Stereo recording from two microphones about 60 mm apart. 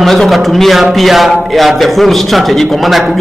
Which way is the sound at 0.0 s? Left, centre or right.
Centre.